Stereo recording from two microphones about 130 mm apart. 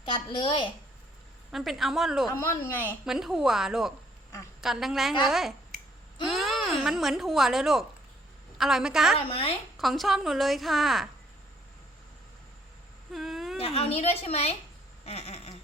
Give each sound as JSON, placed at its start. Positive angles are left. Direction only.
{"t": 0.0, "sound": "a woman's voice", "side_deg": 40}
{"t": 1.5, "sound": "speech", "side_deg": 0}
{"t": 2.3, "sound": "speech", "side_deg": 20}
{"t": 3.0, "sound": "speech", "side_deg": -5}
{"t": 9.1, "sound": "a woman's voice", "side_deg": 45}
{"t": 9.7, "sound": "speech", "side_deg": 0}
{"t": 13.1, "sound": "a sound", "side_deg": 0}
{"t": 13.6, "sound": "a woman's voice", "side_deg": 50}
{"t": 15.0, "sound": "a sound", "side_deg": 50}